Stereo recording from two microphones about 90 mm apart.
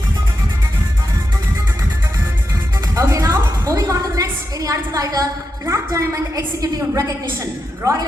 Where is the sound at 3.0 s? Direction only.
35° right (ahead or behind).